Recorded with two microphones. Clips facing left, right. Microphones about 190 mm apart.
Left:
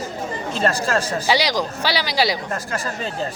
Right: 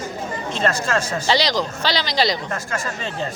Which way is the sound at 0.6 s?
35° left (ahead or behind).